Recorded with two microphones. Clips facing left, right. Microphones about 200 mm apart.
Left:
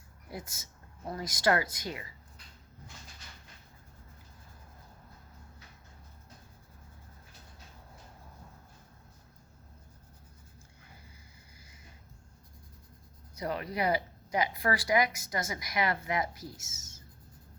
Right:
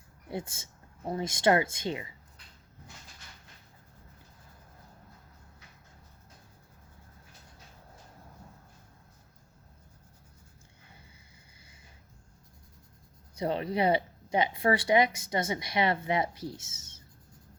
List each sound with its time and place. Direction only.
0.3 s speech: 30° right (ahead or behind)
13.3 s speech: 25° right (ahead or behind)